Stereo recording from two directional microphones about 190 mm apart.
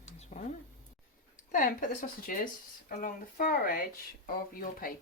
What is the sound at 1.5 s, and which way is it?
Speech, 45° left (ahead or behind).